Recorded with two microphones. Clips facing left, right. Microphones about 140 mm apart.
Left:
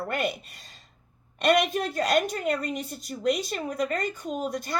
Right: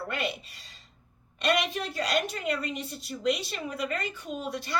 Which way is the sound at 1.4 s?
50° left (ahead or behind).